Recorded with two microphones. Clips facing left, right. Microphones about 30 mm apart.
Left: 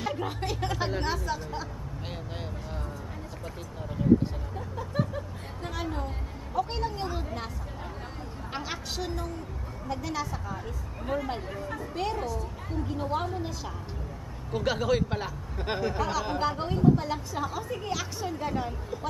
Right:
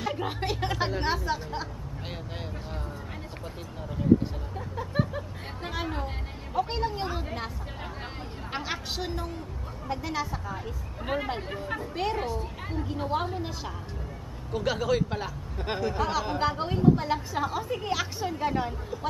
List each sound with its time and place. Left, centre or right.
0.1 s speech: centre
4.6 s a woman's voice: centre
8.5 s a woman's voice: centre
11.1 s speech: right
11.5 s speech: right
12.2 s speech: right
12.8 s speech: centre
14.5 s speech: centre
16.0 s a woman's voice: centre